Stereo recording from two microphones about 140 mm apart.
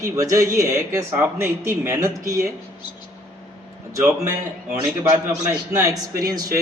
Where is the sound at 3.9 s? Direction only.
20° right (ahead or behind).